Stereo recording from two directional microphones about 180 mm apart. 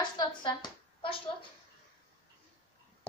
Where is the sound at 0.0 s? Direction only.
25° left (ahead or behind).